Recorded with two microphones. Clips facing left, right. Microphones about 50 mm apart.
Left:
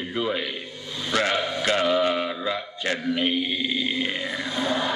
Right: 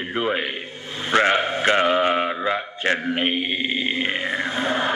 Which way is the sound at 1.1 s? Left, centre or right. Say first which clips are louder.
Right 5 dB; right.